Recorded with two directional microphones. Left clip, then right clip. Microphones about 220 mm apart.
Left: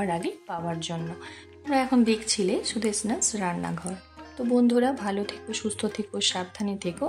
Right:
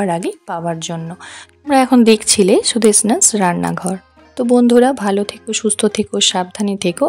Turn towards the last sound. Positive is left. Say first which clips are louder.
# right 14 dB
turn(degrees=-40)  # may be behind; listen again after turning